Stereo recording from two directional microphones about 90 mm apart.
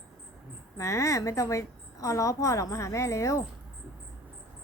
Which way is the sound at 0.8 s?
35° left (ahead or behind).